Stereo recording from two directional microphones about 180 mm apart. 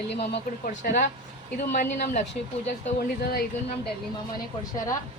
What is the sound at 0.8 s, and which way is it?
Speech, 45° left (ahead or behind).